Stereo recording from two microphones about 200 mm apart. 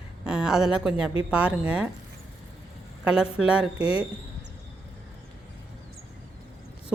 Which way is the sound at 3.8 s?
30° left (ahead or behind).